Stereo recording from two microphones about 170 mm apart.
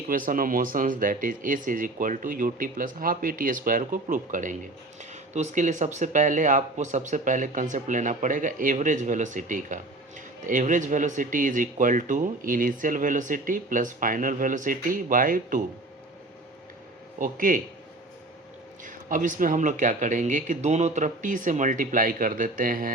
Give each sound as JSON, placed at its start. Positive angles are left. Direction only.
{"t": 0.1, "sound": "speech", "side_deg": -55}
{"t": 17.2, "sound": "speech", "side_deg": -50}
{"t": 18.9, "sound": "speech", "side_deg": -50}